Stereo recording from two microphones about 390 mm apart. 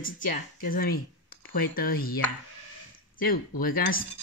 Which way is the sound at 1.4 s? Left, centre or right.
Left.